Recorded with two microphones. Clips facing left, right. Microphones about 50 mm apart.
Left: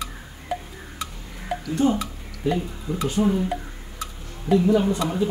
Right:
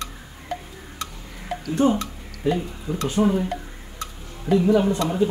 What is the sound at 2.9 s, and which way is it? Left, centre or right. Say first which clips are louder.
Speech: even; right.